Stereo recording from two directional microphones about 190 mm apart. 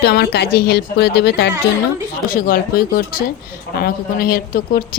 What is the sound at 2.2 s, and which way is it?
Speech, 45° left (ahead or behind).